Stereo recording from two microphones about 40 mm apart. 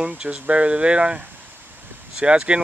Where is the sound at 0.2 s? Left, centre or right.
Right.